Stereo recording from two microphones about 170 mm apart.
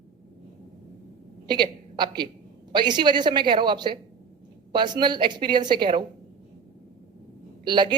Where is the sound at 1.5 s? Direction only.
25° right (ahead or behind).